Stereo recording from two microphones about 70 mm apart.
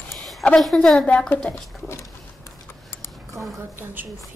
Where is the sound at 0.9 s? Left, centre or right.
Centre.